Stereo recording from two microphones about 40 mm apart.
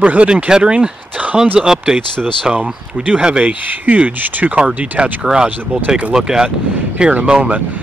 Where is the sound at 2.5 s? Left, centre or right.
Right.